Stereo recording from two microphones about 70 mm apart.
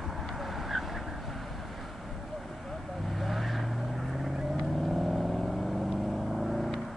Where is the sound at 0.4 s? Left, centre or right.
Centre.